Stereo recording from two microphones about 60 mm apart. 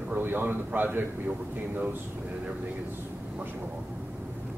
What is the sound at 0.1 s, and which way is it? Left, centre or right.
A man's voice, right.